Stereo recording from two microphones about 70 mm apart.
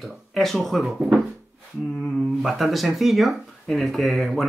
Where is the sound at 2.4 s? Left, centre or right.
Centre.